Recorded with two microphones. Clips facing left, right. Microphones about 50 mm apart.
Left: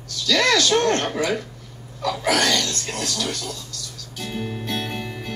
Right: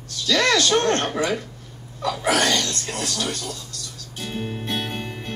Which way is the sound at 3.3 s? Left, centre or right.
Right.